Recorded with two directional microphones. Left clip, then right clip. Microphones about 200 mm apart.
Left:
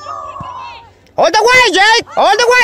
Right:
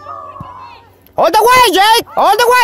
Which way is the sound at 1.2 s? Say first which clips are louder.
Right 1 dB; 15° right (ahead or behind).